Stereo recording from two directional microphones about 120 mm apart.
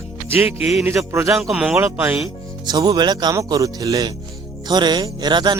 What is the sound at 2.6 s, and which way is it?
A man's voice, 35° right (ahead or behind).